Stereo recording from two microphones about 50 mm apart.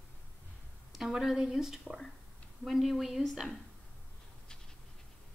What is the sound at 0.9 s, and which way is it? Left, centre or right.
A woman's voice, centre.